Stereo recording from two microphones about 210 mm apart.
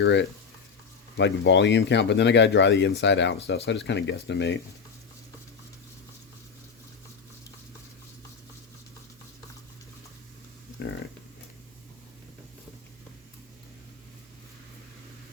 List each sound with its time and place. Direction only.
0.0 s speech: 55° left (ahead or behind)